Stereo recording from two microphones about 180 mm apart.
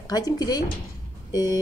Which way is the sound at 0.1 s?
20° left (ahead or behind).